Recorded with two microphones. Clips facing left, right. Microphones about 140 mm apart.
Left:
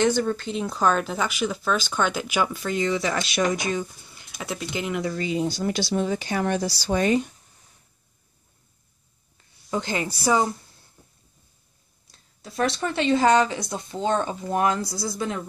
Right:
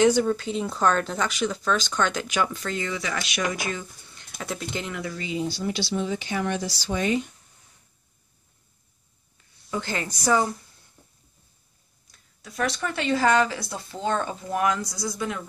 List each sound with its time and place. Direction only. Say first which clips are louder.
0.0 s speech: right 2 dB; 5° right (ahead or behind); by 2.8 s 10° left (ahead or behind)
2.8 s speech: left 9 dB; 30° left (ahead or behind); by 4.9 s 5° left (ahead or behind)
5.1 s speech: left 4 dB; 50° left (ahead or behind)
9.7 s a woman's voice: left 3 dB; 20° left (ahead or behind)
12.1 s speech: left 3 dB; 30° left (ahead or behind)